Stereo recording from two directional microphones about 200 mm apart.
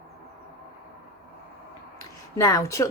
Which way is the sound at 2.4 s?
15° left (ahead or behind).